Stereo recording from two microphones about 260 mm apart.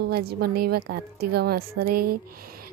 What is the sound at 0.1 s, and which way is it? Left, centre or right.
Speech, right.